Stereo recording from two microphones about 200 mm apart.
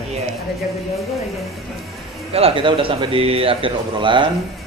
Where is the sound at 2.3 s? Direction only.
25° right (ahead or behind).